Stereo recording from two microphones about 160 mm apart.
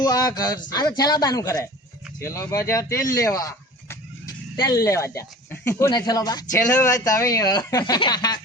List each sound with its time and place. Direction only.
0.0 s speech: 25° left (ahead or behind)